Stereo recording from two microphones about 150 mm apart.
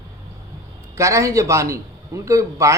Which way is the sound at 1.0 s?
20° right (ahead or behind).